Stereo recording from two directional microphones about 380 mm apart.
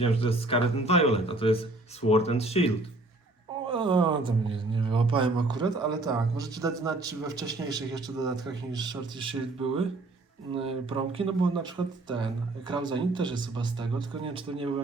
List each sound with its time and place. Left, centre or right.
0.0 s speech: centre
3.7 s speech: centre